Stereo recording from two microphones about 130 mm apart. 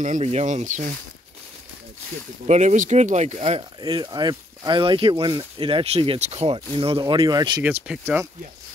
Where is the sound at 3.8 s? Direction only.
35° right (ahead or behind).